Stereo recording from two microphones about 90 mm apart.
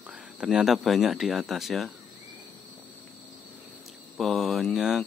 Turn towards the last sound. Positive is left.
turn(degrees=0)  # may be behind; listen again after turning